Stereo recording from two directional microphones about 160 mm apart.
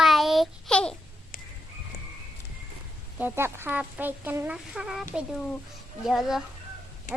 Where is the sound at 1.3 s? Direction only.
60° left (ahead or behind).